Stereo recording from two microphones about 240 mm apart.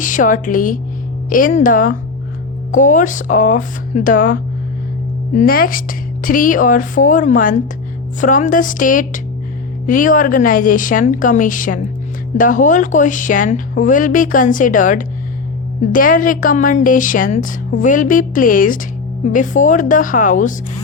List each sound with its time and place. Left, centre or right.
0.0 s a woman's voice: left